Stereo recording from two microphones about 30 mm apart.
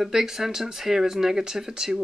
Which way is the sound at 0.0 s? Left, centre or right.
Centre.